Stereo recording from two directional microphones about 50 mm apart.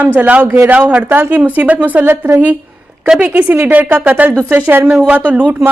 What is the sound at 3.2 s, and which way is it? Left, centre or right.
A woman's voice, right.